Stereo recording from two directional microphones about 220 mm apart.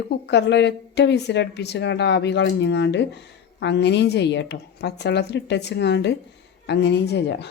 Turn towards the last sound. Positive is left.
turn(degrees=50)  # may be behind; listen again after turning